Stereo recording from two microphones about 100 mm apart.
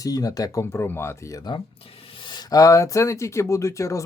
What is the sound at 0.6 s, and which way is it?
Speech, 25° left (ahead or behind).